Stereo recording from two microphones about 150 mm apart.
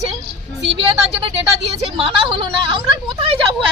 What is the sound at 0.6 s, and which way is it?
A woman's voice, 40° right (ahead or behind).